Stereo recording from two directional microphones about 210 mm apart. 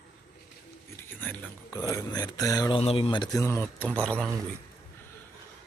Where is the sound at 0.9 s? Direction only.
10° left (ahead or behind).